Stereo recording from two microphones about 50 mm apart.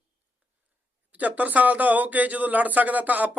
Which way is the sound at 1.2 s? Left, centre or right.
Right.